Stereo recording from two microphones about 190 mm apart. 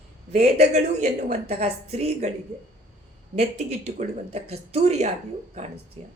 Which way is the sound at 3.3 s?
35° right (ahead or behind).